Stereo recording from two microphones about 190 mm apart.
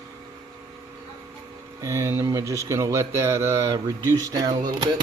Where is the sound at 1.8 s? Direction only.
15° right (ahead or behind).